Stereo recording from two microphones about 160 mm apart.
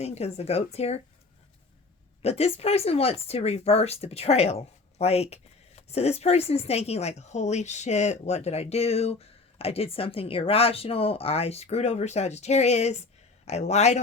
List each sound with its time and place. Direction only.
0.0 s speech: 40° left (ahead or behind)
2.2 s speech: 40° left (ahead or behind)